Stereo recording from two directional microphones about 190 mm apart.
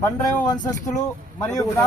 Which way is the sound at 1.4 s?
15° left (ahead or behind).